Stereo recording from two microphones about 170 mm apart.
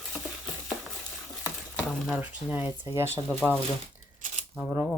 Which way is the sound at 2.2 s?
10° right (ahead or behind).